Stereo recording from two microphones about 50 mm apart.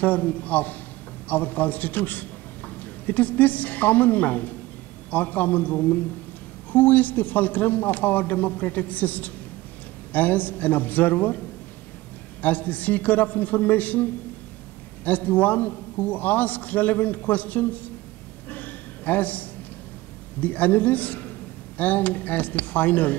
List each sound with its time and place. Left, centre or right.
0.0 s a man's voice: left
18.5 s a sound: left
20.3 s a man's voice: left